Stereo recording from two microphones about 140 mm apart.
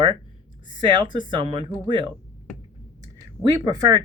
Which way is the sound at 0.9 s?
35° right (ahead or behind).